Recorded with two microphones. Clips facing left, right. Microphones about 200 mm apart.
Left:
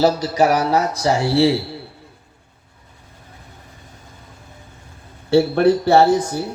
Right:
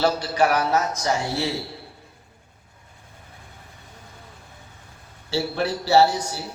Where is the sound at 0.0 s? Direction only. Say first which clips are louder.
Left 5 dB; 35° left (ahead or behind).